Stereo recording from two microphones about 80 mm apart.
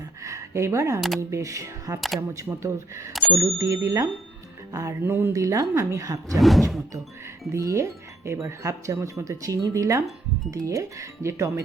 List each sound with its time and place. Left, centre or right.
0.2 s speech: right
3.1 s speech: centre
3.3 s speech: right
5.0 s speech: right
5.3 s a woman's voice: right
6.3 s speech: centre
7.5 s speech: right